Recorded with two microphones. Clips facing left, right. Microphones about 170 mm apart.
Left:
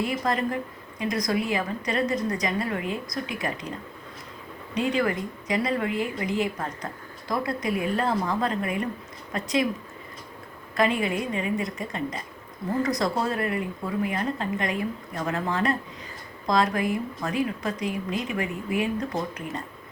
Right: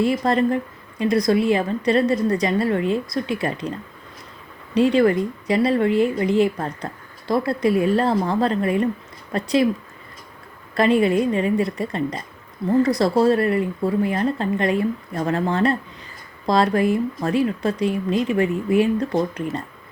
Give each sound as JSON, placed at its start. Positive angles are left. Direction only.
{"t": 0.0, "sound": "speech", "side_deg": -30}
{"t": 4.7, "sound": "speech", "side_deg": -30}
{"t": 10.8, "sound": "speech", "side_deg": -35}